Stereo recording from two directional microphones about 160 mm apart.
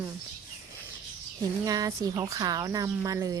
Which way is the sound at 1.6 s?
20° right (ahead or behind).